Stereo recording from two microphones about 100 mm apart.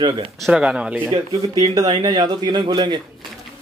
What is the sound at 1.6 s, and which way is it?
Speech, 45° right (ahead or behind).